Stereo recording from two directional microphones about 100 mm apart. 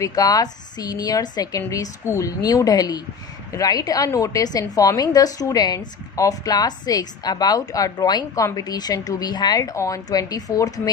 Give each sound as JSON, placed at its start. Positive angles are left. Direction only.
{"t": 0.0, "sound": "a woman's voice", "side_deg": 35}